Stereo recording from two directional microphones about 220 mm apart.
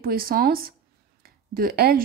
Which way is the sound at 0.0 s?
40° right (ahead or behind).